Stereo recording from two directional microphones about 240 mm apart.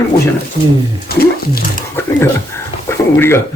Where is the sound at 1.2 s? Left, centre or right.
Left.